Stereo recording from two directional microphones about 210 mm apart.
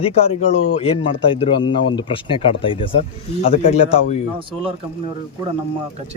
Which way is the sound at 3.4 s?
35° left (ahead or behind).